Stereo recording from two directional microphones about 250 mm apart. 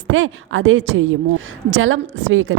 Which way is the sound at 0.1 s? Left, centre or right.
Right.